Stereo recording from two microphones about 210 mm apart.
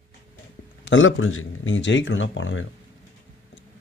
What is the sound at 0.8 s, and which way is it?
Speech, 65° left (ahead or behind).